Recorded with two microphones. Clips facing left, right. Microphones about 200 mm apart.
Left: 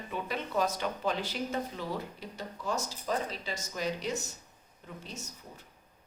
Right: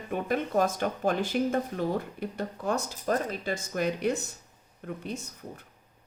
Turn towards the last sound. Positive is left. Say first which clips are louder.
# right 4 dB
turn(degrees=-55)  # may be behind; listen again after turning